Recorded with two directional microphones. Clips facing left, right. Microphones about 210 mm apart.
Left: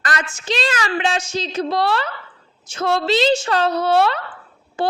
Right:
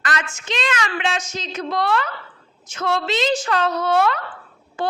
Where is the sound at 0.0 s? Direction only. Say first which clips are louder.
Left 1 dB; 35° left (ahead or behind).